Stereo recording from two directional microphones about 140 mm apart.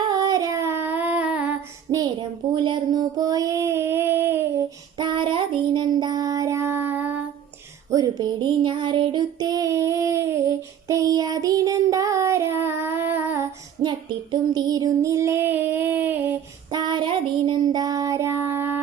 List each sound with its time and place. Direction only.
0.1 s a sound: 30° right (ahead or behind); by 1.5 s 10° right (ahead or behind)
1.9 s a sound: 30° right (ahead or behind)
2.6 s child singing: 30° right (ahead or behind)
4.9 s child singing: 35° right (ahead or behind); by 7.2 s 15° right (ahead or behind)
7.9 s child singing: 25° right (ahead or behind)
13.8 s child singing: 30° right (ahead or behind); by 16.1 s 15° right (ahead or behind)
16.7 s child singing: 30° right (ahead or behind)